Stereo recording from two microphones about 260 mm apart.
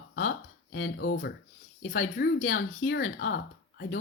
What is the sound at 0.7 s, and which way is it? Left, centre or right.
Speech, left.